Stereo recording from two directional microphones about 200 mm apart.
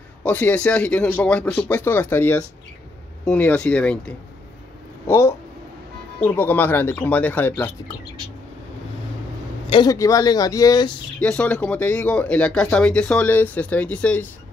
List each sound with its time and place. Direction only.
0.2 s speech: 10° left (ahead or behind)
9.7 s speech: 20° left (ahead or behind)
11.1 s speech: 5° left (ahead or behind)